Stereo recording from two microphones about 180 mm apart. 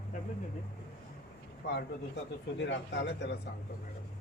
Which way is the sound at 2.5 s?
75° left (ahead or behind).